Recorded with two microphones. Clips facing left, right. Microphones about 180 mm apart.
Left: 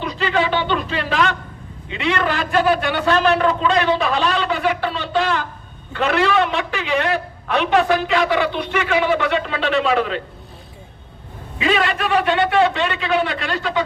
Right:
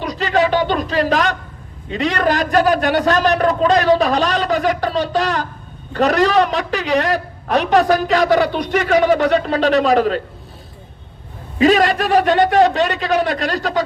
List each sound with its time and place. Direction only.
0.0 s a woman's voice: 40° right (ahead or behind)
11.5 s a woman's voice: 40° right (ahead or behind)